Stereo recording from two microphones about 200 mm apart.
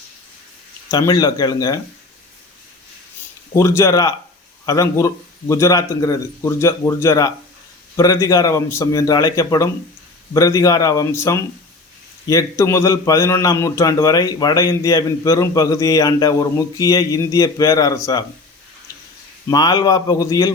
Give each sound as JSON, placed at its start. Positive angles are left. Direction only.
{"t": 0.9, "sound": "a man's voice", "side_deg": 20}
{"t": 3.5, "sound": "a man's voice", "side_deg": 15}
{"t": 19.5, "sound": "a man's voice", "side_deg": 20}